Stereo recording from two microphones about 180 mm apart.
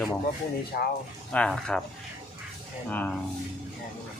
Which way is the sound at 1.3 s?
5° left (ahead or behind).